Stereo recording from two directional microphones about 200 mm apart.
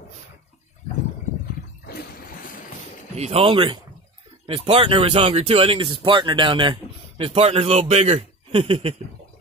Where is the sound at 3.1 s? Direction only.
30° right (ahead or behind).